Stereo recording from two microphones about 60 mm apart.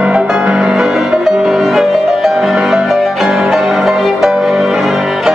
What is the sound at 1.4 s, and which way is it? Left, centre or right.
Music, centre.